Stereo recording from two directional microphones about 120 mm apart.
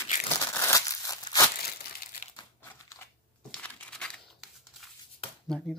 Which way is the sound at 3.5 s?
10° left (ahead or behind).